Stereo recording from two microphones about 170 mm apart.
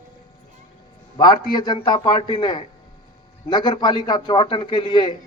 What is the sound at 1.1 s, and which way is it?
A man's voice, 25° left (ahead or behind).